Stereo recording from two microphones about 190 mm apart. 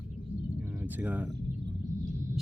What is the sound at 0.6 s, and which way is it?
Speech, 10° right (ahead or behind).